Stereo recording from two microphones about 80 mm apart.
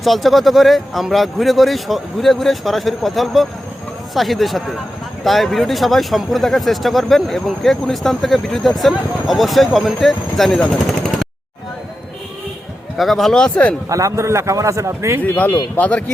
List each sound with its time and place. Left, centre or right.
0.0 s speech: centre
13.0 s speech: centre
13.9 s a man's voice: right
15.2 s speech: left